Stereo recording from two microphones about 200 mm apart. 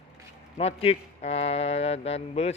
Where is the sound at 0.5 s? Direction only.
30° left (ahead or behind).